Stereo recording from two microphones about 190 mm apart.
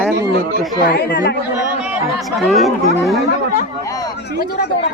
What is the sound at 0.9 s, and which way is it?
Speech, 60° left (ahead or behind).